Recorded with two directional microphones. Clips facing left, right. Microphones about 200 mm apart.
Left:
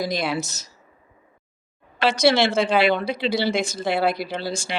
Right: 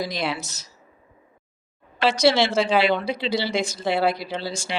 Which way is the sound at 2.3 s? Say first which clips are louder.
Left 2 dB; 55° left (ahead or behind).